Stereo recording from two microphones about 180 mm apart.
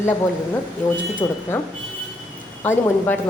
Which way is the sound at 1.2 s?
20° left (ahead or behind).